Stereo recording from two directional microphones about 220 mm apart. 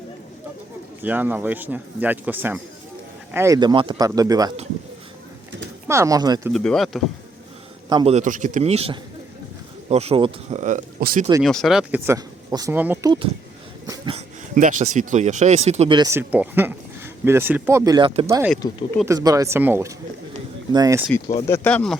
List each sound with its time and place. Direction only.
1.0 s speech: 10° right (ahead or behind)
5.9 s speech: 15° right (ahead or behind)
6.5 s speech: 5° left (ahead or behind)
7.9 s a man's voice: 25° right (ahead or behind)
10.6 s speech: 35° right (ahead or behind)
11.4 s speech: centre (ahead or behind)
13.8 s a sound: 20° right (ahead or behind)
14.5 s speech: 35° right (ahead or behind); by 21.0 s 15° right (ahead or behind)
21.4 s speech: 10° left (ahead or behind)